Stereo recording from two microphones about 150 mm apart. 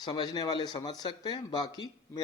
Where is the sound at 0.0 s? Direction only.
30° left (ahead or behind).